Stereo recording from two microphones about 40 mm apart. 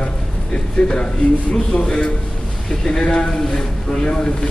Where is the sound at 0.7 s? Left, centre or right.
Left.